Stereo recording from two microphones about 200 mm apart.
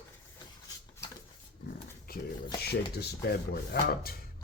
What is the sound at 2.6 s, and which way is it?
Speech, 55° left (ahead or behind).